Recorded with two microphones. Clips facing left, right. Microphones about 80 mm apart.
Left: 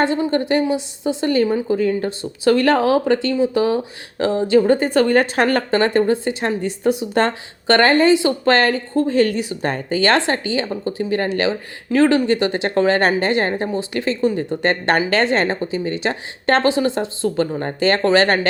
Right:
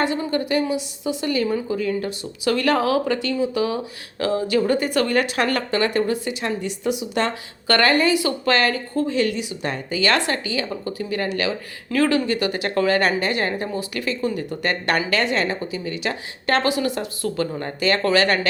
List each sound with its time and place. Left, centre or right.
0.0 s speech: left
7.7 s speech: left